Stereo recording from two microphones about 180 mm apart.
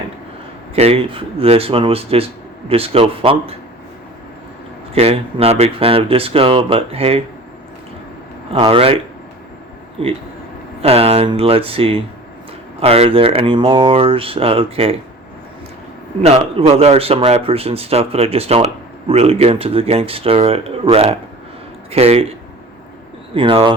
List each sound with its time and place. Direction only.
0.8 s speech: 35° right (ahead or behind)
4.9 s speech: 35° right (ahead or behind)
8.5 s speech: 30° right (ahead or behind)
10.8 s speech: 35° right (ahead or behind)
16.2 s speech: 35° right (ahead or behind)
23.3 s speech: 30° right (ahead or behind)